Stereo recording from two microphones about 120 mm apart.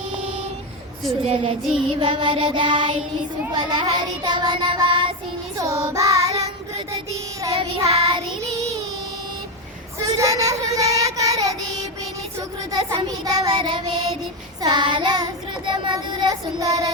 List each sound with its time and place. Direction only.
1.2 s child singing: 50° right (ahead or behind)
5.5 s child singing: 30° right (ahead or behind)
7.9 s child singing: 55° right (ahead or behind)
10.0 s child singing: 25° right (ahead or behind)